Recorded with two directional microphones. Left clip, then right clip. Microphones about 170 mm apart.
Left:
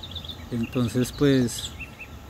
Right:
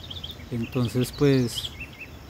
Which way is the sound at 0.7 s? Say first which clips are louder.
Left 1 dB; 15° right (ahead or behind).